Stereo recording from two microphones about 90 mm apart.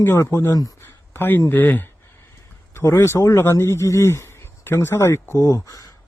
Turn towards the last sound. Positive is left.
turn(degrees=35)  # may be behind; listen again after turning